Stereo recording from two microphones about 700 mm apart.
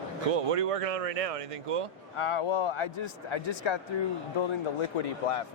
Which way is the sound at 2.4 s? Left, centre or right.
Left.